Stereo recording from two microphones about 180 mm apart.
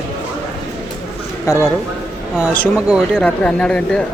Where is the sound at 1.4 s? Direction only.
15° left (ahead or behind).